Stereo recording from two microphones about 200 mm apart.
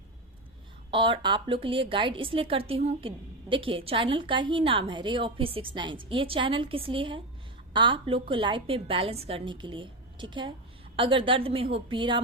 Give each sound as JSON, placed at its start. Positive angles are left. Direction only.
{"t": 0.9, "sound": "a woman's voice", "side_deg": -25}